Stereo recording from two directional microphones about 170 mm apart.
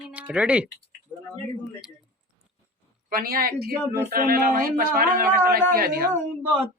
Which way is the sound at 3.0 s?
60° right (ahead or behind).